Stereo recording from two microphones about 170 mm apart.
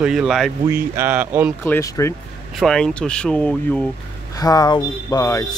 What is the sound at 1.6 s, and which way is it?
Speech, 15° left (ahead or behind).